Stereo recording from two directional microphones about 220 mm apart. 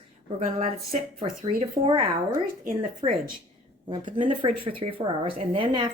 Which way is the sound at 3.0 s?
25° right (ahead or behind).